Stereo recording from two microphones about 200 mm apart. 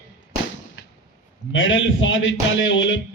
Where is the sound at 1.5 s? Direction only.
75° left (ahead or behind).